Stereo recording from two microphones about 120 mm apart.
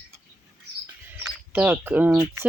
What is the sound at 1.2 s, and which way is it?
Speech, 15° right (ahead or behind).